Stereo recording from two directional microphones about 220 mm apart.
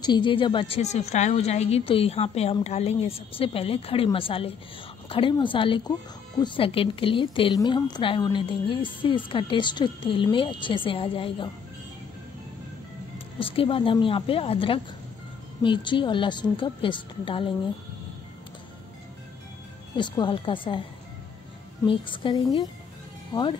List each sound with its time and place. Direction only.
0.0 s speech: 20° left (ahead or behind)
13.4 s speech: 25° left (ahead or behind)
20.0 s speech: 20° left (ahead or behind)
21.8 s speech: 20° left (ahead or behind)